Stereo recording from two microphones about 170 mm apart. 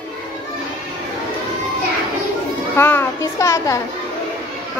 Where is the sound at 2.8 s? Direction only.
15° left (ahead or behind).